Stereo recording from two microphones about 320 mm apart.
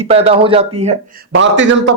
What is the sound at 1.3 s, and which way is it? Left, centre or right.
Speech, right.